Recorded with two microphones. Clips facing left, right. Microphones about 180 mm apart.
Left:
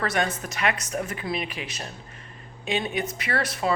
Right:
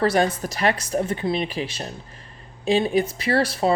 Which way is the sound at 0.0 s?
30° right (ahead or behind).